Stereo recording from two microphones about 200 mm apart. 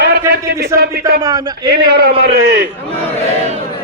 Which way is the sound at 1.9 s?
50° right (ahead or behind).